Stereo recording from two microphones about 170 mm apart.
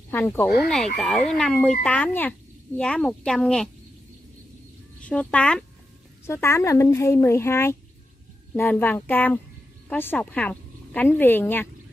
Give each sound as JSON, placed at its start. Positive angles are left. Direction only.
{"t": 0.1, "sound": "speech", "side_deg": 10}
{"t": 5.0, "sound": "speech", "side_deg": 5}